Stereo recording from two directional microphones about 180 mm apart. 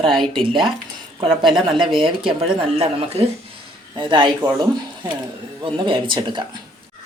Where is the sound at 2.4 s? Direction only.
30° right (ahead or behind).